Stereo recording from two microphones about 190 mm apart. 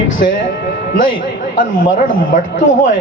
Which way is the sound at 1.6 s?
45° left (ahead or behind).